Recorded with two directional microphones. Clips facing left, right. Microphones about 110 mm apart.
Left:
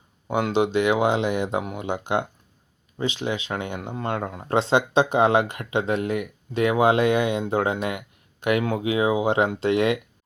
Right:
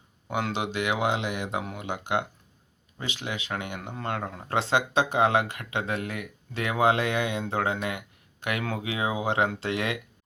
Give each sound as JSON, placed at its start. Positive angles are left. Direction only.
{"t": 0.3, "sound": "speech", "side_deg": 20}